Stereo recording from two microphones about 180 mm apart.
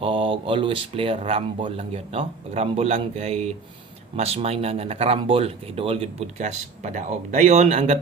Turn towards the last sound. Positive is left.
turn(degrees=-40)  # may be behind; listen again after turning